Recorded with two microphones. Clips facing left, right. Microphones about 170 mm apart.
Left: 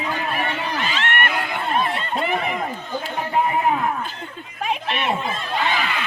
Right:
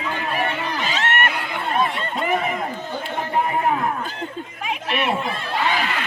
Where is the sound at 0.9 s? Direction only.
40° right (ahead or behind).